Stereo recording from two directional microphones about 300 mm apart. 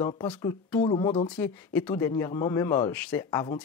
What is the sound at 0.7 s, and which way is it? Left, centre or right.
Speech, centre.